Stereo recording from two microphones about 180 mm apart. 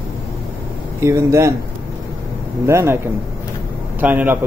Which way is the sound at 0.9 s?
15° right (ahead or behind).